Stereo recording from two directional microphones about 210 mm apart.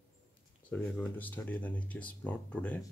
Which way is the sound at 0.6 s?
5° left (ahead or behind).